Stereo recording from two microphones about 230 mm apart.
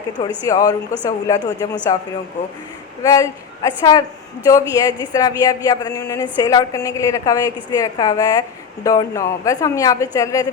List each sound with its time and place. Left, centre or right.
0.4 s a woman's voice: centre
3.0 s a woman's voice: centre